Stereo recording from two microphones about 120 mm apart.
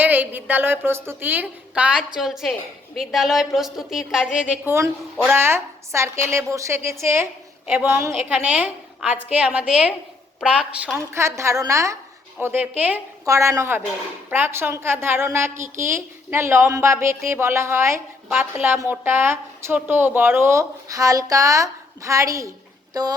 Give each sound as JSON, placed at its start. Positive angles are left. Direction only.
{"t": 0.0, "sound": "a woman's voice", "side_deg": -15}
{"t": 10.9, "sound": "a woman's voice", "side_deg": -25}
{"t": 12.4, "sound": "a woman's voice", "side_deg": -15}
{"t": 13.2, "sound": "a woman's voice", "side_deg": -25}
{"t": 22.9, "sound": "music", "side_deg": -30}